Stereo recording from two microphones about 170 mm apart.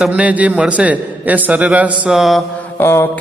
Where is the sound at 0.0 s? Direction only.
5° right (ahead or behind).